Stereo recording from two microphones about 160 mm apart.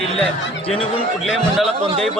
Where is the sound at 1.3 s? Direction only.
Centre (ahead or behind).